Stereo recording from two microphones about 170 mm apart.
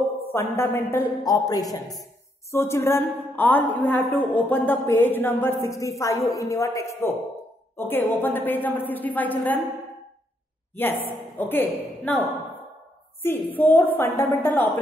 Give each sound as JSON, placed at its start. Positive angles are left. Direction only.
{"t": 0.2, "sound": "a man's voice", "side_deg": 15}
{"t": 10.8, "sound": "a woman's voice", "side_deg": 10}